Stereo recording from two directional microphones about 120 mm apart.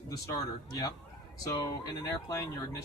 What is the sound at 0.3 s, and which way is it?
A man's voice, 35° left (ahead or behind).